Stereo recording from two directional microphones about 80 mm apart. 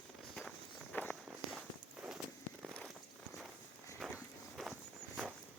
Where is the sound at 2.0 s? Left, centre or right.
Centre.